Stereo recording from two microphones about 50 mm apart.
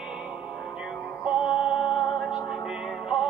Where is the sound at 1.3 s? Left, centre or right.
Centre.